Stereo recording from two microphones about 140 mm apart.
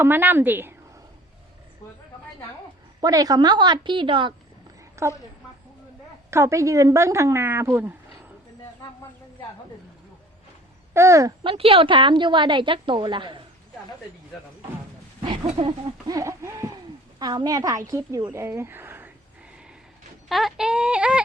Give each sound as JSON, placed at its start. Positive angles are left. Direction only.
{"t": 0.0, "sound": "a woman's voice", "side_deg": -15}
{"t": 3.0, "sound": "a woman's voice", "side_deg": -25}
{"t": 5.0, "sound": "speech", "side_deg": -20}
{"t": 6.3, "sound": "speech", "side_deg": -20}
{"t": 10.9, "sound": "speech", "side_deg": -20}
{"t": 11.4, "sound": "a woman's voice", "side_deg": -40}
{"t": 15.2, "sound": "a woman's voice", "side_deg": -40}
{"t": 16.0, "sound": "a sound", "side_deg": -25}
{"t": 17.2, "sound": "speech", "side_deg": -30}
{"t": 20.2, "sound": "speech", "side_deg": 0}